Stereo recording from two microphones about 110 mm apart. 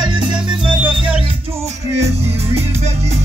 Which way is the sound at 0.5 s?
10° right (ahead or behind).